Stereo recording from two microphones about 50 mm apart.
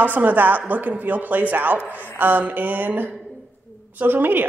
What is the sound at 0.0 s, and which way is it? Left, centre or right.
Speech, right.